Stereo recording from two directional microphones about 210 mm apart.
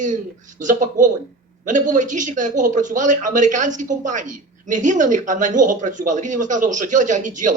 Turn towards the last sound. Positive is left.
turn(degrees=-35)  # may be behind; listen again after turning